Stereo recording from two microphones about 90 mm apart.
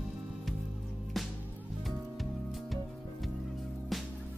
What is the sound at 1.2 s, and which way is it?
Music, centre (ahead or behind).